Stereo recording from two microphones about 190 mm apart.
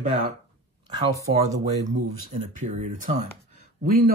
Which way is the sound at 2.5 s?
40° right (ahead or behind).